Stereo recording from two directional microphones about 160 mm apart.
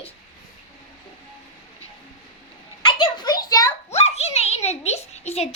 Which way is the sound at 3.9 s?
40° left (ahead or behind).